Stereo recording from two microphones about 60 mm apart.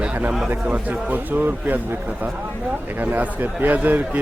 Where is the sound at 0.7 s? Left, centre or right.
Right.